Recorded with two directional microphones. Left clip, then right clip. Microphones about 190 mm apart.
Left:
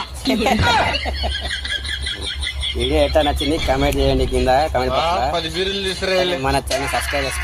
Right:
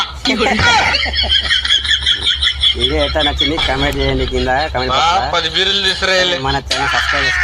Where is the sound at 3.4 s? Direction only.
40° right (ahead or behind).